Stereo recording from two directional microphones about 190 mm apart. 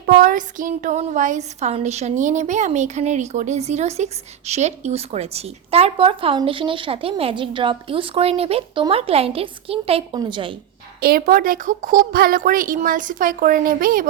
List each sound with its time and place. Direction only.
0.0 s speech: 50° right (ahead or behind); by 10.5 s 25° right (ahead or behind)
11.0 s a woman's voice: 50° right (ahead or behind)